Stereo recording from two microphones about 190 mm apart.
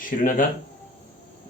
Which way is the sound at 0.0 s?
45° left (ahead or behind).